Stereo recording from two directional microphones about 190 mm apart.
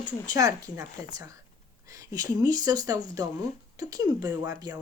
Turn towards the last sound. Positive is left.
turn(degrees=-20)  # may be behind; listen again after turning